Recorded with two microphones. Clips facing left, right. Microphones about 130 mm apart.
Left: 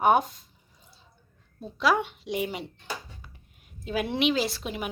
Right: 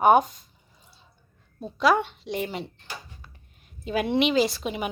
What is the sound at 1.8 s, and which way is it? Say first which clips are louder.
Speech: right 3 dB; 5° left (ahead or behind).